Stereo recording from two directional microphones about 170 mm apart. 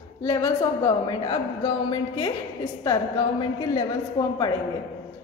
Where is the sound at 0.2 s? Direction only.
20° left (ahead or behind).